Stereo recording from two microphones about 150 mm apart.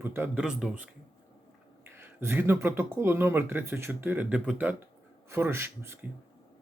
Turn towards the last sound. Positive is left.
turn(degrees=-15)  # may be behind; listen again after turning